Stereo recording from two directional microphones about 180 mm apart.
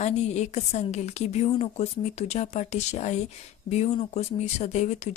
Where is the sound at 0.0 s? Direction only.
40° left (ahead or behind).